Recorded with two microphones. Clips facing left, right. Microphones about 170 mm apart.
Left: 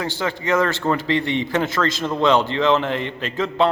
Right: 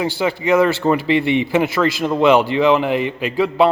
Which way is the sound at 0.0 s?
10° right (ahead or behind).